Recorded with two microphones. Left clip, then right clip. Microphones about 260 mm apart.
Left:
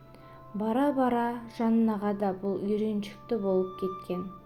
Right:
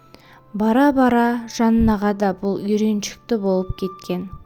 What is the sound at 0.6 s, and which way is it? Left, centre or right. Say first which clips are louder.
A woman's voice: right 11 dB; right.